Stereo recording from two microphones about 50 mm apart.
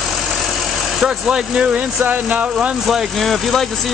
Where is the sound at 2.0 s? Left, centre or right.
Right.